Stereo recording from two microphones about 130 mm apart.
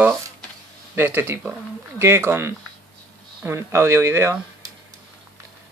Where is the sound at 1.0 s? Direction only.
15° right (ahead or behind).